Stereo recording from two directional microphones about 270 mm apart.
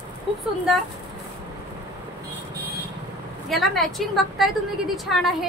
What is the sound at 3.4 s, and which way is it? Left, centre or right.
A woman's voice, centre.